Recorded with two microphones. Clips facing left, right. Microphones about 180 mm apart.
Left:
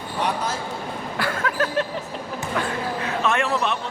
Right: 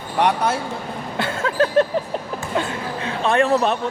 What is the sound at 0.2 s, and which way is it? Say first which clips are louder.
Speech: right 7 dB; 65° right (ahead or behind).